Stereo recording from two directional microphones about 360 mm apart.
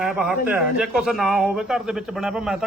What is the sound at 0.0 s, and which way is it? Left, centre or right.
Speech, centre.